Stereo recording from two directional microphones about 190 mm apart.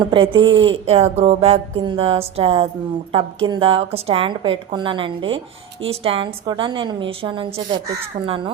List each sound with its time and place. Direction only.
0.0 s speech: 25° right (ahead or behind)